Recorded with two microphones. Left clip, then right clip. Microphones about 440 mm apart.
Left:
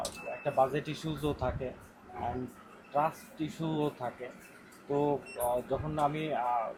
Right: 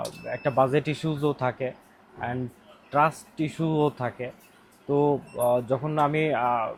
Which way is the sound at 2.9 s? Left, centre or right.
Right.